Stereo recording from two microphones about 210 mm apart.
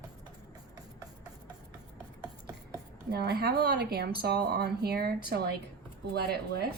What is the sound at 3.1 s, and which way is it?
A woman's voice, 50° right (ahead or behind).